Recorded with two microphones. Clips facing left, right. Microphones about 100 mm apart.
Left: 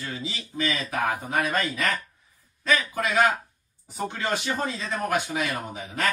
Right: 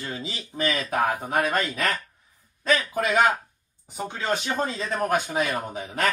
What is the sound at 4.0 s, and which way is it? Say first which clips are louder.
Speech: right 1 dB; 15° right (ahead or behind).